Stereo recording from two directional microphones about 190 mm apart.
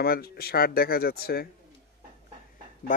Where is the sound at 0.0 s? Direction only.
55° left (ahead or behind).